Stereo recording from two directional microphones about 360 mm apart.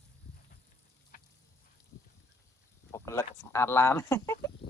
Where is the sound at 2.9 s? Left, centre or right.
Centre.